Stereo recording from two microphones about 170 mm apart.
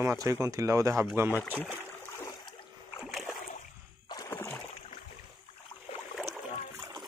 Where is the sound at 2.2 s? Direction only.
20° left (ahead or behind).